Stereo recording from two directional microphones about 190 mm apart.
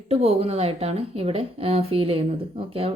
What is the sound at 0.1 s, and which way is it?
Speech, 35° right (ahead or behind).